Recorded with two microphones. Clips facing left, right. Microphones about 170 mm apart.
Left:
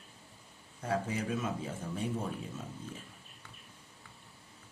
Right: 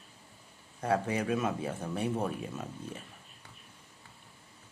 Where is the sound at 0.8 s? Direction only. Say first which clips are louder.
Right 4 dB; 65° right (ahead or behind).